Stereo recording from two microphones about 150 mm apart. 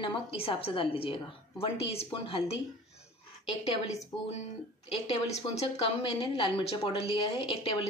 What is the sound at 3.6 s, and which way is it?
A woman's voice, 45° left (ahead or behind).